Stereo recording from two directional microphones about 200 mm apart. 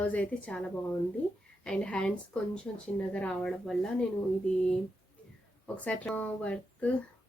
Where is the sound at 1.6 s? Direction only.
5° left (ahead or behind).